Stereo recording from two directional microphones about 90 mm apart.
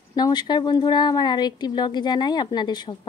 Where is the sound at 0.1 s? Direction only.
50° left (ahead or behind).